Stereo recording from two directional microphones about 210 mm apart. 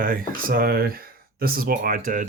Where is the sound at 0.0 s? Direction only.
40° right (ahead or behind).